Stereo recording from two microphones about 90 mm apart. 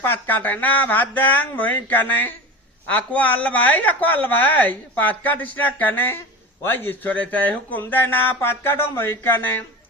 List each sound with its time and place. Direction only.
0.0 s speech: 20° left (ahead or behind)